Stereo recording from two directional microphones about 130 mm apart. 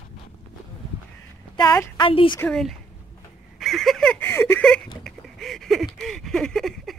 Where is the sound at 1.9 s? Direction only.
40° left (ahead or behind).